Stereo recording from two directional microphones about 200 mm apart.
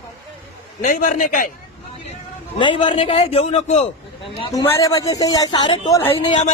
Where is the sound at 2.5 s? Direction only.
25° left (ahead or behind).